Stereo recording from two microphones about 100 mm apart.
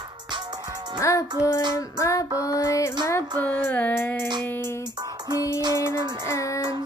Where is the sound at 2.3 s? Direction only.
15° right (ahead or behind).